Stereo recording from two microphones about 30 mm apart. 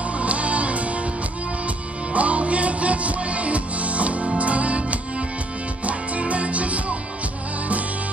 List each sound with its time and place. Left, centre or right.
0.2 s music: right
2.1 s music: right